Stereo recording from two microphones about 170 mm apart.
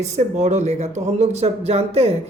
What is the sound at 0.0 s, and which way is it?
Speech, 45° right (ahead or behind).